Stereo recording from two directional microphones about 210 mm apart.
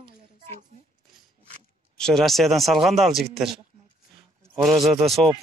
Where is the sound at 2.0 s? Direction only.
Centre (ahead or behind).